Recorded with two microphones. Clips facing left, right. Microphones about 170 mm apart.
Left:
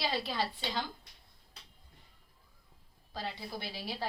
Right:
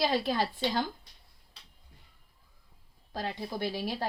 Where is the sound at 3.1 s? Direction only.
50° right (ahead or behind).